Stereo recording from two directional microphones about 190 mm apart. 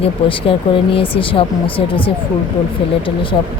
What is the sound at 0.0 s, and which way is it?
Speech, 30° left (ahead or behind).